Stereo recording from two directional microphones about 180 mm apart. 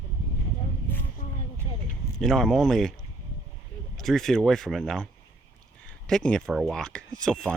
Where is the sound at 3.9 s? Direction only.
Centre (ahead or behind).